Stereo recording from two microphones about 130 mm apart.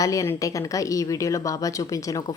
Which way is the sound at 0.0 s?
25° left (ahead or behind).